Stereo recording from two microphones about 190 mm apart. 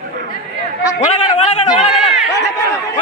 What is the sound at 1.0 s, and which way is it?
Speech, 35° left (ahead or behind).